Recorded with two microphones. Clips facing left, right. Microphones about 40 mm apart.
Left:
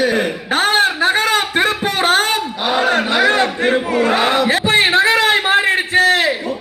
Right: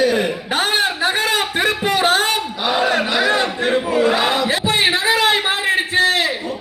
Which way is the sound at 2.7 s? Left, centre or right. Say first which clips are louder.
Left 2 dB; left.